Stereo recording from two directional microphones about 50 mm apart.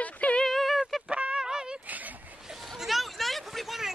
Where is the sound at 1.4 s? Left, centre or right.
Centre.